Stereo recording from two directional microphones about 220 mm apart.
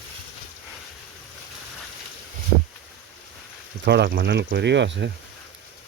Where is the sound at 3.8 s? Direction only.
50° right (ahead or behind).